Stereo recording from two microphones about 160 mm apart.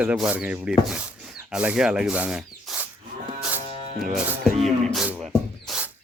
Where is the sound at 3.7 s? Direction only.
60° right (ahead or behind).